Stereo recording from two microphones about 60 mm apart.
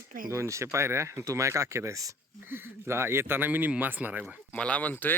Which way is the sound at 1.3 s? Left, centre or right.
Right.